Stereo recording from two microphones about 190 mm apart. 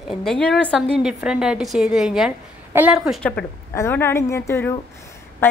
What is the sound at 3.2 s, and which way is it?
A woman's voice, 5° left (ahead or behind).